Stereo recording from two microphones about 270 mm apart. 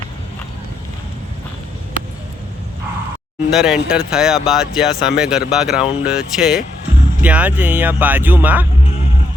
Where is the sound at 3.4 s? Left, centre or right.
Centre.